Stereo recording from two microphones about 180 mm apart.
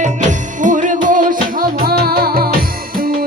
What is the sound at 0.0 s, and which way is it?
Music, 45° right (ahead or behind).